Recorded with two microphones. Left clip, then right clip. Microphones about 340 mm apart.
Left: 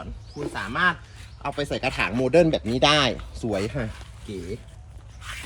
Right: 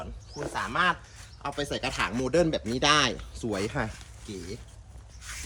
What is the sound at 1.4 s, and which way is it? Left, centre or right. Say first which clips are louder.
Speech: left 4 dB; centre.